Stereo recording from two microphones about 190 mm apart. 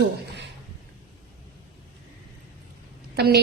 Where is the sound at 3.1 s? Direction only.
55° right (ahead or behind).